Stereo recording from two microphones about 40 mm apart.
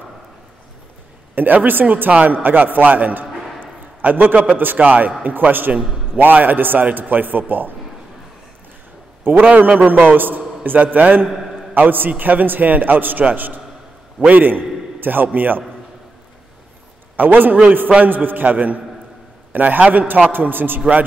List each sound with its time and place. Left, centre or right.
1.3 s a man's voice: right
4.8 s a man's voice: right
5.2 s a man's voice: right
9.2 s a man's voice: right
14.3 s a man's voice: right
17.2 s a man's voice: right